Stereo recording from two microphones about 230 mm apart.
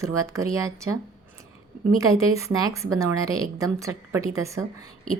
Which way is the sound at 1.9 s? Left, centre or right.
Centre.